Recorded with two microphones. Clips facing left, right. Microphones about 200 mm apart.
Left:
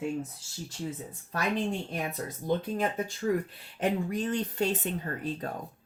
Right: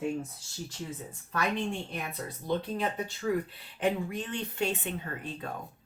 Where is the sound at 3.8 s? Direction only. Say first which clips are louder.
Left 1 dB; 40° left (ahead or behind).